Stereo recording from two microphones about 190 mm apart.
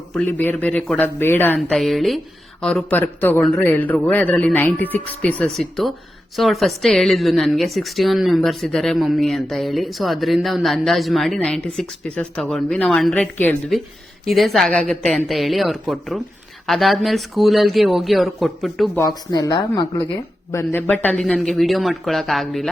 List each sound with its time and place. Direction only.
0.2 s speech: 10° left (ahead or behind)
1.7 s a woman's voice: centre (ahead or behind)
18.9 s a woman's voice: 20° left (ahead or behind)
20.5 s a woman's voice: 15° left (ahead or behind)